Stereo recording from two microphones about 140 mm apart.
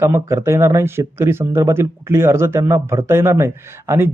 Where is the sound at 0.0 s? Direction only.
20° right (ahead or behind).